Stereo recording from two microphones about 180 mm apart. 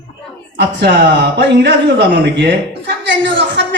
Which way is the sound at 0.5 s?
70° right (ahead or behind).